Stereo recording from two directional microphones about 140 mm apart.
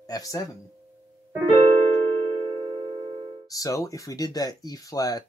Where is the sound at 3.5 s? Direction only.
25° left (ahead or behind).